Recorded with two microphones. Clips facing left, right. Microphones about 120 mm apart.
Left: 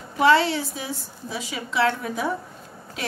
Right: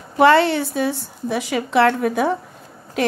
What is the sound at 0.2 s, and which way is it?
A woman's voice, 60° right (ahead or behind).